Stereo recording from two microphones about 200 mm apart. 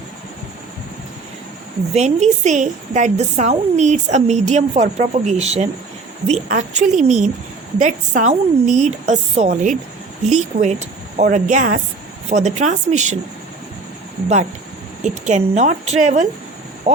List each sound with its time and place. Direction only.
2.0 s a woman's voice: 35° right (ahead or behind)
15.0 s a woman's voice: 35° right (ahead or behind)